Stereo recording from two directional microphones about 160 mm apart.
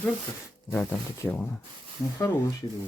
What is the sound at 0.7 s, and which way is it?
Speech, 15° left (ahead or behind).